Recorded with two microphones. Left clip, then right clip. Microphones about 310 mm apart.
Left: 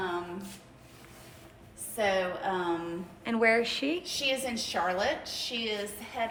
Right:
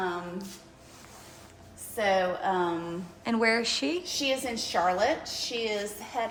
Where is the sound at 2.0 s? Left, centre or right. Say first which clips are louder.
Right 3 dB; right.